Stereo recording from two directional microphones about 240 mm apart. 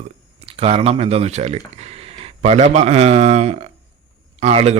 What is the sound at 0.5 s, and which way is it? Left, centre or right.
A man's voice, right.